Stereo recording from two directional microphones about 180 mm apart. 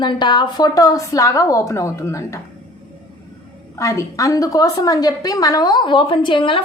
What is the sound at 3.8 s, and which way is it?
A woman's voice, 20° left (ahead or behind).